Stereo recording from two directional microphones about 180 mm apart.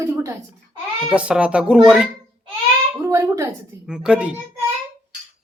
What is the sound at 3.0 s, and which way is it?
Speech, 15° right (ahead or behind).